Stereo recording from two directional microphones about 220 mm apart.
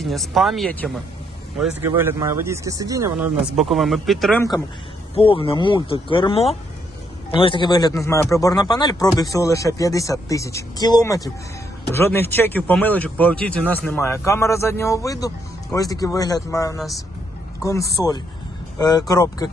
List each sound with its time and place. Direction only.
0.0 s speech: centre (ahead or behind)
5.1 s speech: 25° left (ahead or behind)